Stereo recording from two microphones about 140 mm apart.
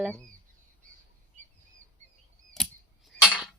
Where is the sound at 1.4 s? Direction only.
60° right (ahead or behind).